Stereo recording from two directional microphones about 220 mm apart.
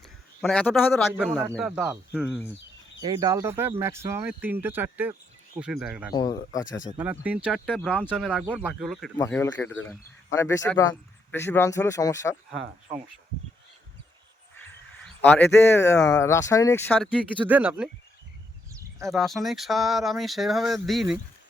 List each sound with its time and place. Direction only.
0.4 s speech: 5° left (ahead or behind)
3.0 s speech: 15° right (ahead or behind)
6.1 s speech: 20° left (ahead or behind)
6.9 s speech: 5° right (ahead or behind)
9.1 s speech: 15° left (ahead or behind)
15.2 s speech: 10° left (ahead or behind)
17.4 s speech: 10° right (ahead or behind)
19.0 s speech: centre (ahead or behind)